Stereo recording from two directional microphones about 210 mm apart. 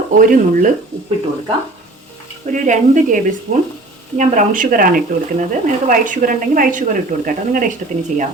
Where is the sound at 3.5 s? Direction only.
50° right (ahead or behind).